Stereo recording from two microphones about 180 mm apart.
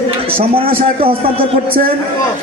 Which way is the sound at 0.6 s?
30° right (ahead or behind).